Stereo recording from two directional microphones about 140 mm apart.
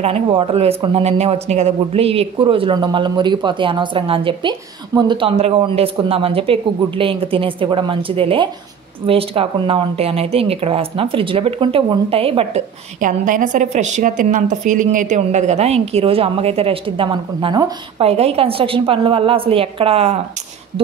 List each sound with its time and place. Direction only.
0.0 s speech: 40° right (ahead or behind)
5.3 s speech: 45° right (ahead or behind)
13.0 s a woman's voice: 70° right (ahead or behind); by 20.2 s 45° right (ahead or behind)